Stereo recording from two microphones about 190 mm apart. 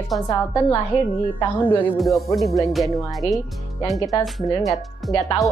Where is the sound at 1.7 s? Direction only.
5° left (ahead or behind).